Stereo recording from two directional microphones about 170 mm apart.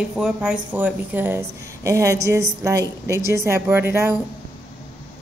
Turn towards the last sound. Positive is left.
turn(degrees=-15)  # may be behind; listen again after turning